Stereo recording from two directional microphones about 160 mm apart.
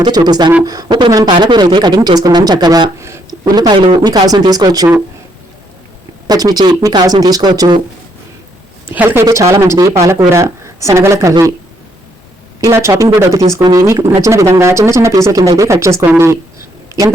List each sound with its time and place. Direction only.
0.0 s speech: 25° right (ahead or behind)
6.2 s speech: 25° right (ahead or behind)
8.9 s a woman's voice: 10° right (ahead or behind)
12.5 s a woman's voice: 20° right (ahead or behind)